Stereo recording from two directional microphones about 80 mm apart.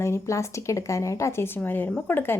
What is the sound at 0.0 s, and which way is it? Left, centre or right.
A woman's voice, left.